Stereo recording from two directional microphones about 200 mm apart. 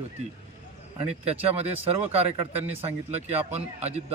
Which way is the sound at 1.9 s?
30° right (ahead or behind).